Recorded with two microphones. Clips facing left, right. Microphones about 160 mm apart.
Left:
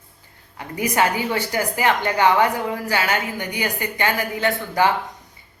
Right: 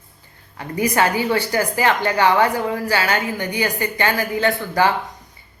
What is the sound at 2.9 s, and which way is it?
A woman's voice, 20° left (ahead or behind).